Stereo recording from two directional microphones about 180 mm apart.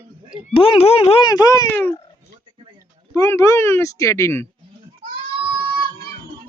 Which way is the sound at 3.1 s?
15° left (ahead or behind).